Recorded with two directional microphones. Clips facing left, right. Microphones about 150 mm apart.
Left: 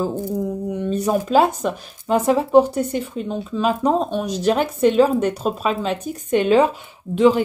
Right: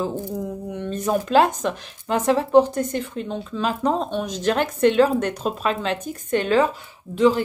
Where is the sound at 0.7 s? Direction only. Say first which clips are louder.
Left 2 dB; 10° left (ahead or behind).